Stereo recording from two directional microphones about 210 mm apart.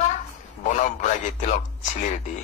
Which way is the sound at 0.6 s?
35° left (ahead or behind).